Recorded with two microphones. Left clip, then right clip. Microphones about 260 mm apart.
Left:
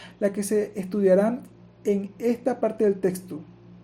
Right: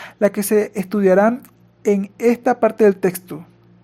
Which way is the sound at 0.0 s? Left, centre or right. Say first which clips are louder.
Right 8 dB; right.